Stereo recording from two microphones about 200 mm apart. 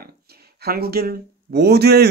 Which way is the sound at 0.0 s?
50° right (ahead or behind).